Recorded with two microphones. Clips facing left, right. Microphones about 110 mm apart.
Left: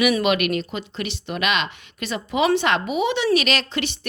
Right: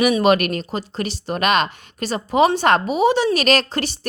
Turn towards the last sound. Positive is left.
turn(degrees=-40)  # may be behind; listen again after turning